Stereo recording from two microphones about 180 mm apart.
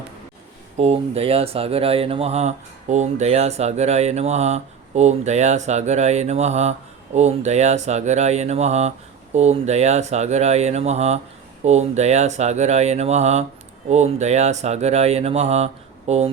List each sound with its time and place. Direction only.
0.8 s speech: 35° right (ahead or behind)